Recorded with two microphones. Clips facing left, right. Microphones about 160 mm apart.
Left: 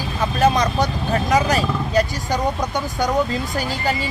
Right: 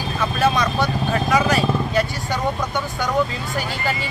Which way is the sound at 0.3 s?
40° left (ahead or behind).